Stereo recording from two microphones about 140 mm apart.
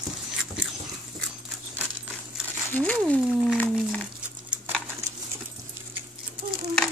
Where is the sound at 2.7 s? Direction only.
10° left (ahead or behind).